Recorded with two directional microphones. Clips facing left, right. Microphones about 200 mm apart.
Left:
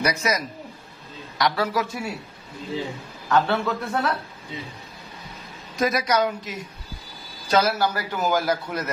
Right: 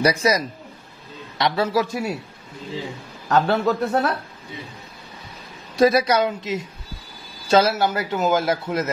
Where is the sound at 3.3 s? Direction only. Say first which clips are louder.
Right 3 dB; 40° right (ahead or behind).